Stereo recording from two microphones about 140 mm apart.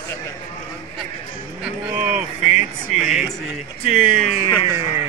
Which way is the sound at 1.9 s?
10° right (ahead or behind).